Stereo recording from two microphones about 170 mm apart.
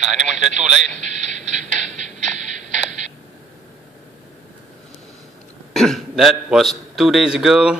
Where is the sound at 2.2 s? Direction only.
45° right (ahead or behind).